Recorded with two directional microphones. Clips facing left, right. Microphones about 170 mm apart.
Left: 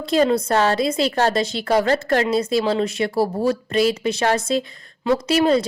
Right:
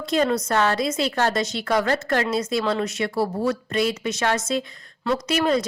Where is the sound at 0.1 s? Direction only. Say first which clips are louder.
Left 4 dB; 30° left (ahead or behind).